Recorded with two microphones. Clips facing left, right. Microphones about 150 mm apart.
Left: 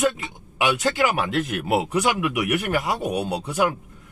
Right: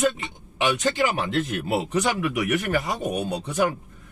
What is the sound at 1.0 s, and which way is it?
Speech, 80° left.